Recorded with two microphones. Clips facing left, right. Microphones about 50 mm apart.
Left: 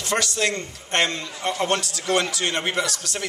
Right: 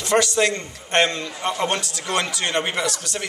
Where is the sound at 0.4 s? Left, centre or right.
Centre.